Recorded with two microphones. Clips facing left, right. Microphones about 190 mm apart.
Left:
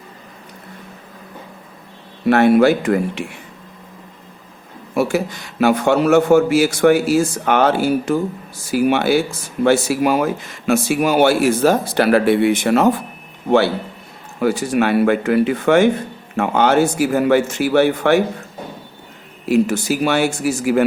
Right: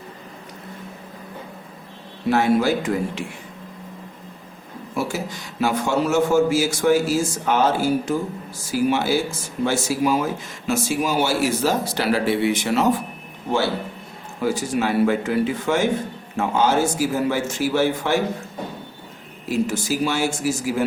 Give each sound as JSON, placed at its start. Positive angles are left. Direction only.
{"t": 2.2, "sound": "a man's voice", "side_deg": 65}
{"t": 4.9, "sound": "a man's voice", "side_deg": 60}
{"t": 14.4, "sound": "a man's voice", "side_deg": 65}
{"t": 19.5, "sound": "a man's voice", "side_deg": 65}